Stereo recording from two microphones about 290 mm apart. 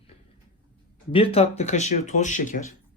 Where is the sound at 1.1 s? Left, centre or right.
Centre.